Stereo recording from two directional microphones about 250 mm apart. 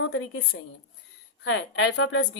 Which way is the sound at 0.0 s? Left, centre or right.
Left.